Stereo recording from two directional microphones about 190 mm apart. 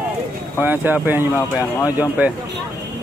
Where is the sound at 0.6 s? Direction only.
10° right (ahead or behind).